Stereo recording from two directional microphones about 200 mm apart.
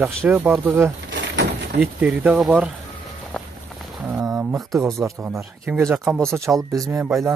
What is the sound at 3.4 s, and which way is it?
Walk, 5° left (ahead or behind).